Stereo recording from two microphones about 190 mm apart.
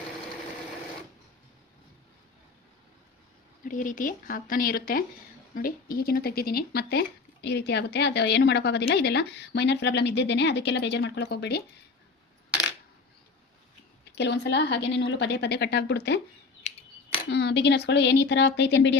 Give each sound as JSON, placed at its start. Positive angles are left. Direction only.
{"t": 3.6, "sound": "a woman's voice", "side_deg": 45}
{"t": 14.2, "sound": "a woman's voice", "side_deg": 65}
{"t": 17.2, "sound": "a woman's voice", "side_deg": 65}